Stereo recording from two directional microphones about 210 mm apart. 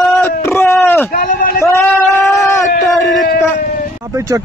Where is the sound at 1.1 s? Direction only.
45° left (ahead or behind).